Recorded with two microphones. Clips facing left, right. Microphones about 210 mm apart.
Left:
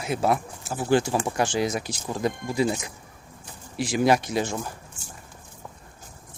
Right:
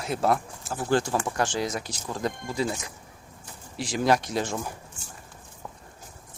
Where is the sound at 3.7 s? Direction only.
10° left (ahead or behind).